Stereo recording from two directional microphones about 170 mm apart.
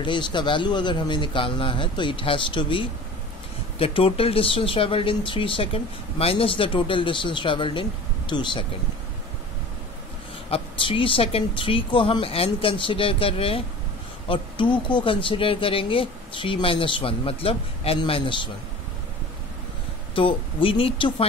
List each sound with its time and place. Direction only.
0.0 s a man's voice: 25° left (ahead or behind)
10.5 s speech: 30° left (ahead or behind)
20.2 s speech: 30° left (ahead or behind)